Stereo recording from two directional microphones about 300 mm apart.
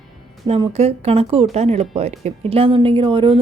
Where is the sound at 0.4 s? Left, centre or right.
Centre.